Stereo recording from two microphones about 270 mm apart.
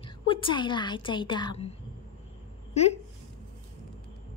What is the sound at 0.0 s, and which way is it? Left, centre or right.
A woman's voice, centre.